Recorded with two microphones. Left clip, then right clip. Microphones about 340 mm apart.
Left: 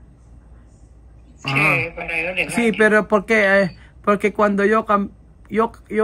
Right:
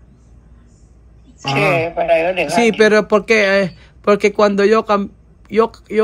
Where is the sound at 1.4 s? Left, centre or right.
Centre.